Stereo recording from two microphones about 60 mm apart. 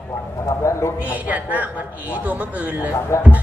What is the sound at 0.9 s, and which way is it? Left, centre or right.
Speech, right.